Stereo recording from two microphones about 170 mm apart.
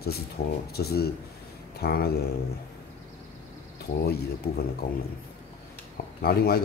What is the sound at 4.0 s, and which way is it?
Speech, 70° left (ahead or behind).